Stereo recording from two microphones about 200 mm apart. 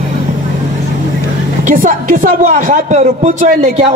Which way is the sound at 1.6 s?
40° right (ahead or behind).